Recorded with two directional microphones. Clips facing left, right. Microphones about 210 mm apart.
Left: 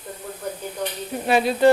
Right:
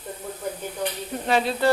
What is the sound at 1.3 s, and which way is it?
Sizzle, 10° left (ahead or behind).